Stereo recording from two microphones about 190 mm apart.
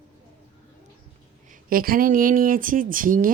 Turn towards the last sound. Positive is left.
turn(degrees=-45)  # may be behind; listen again after turning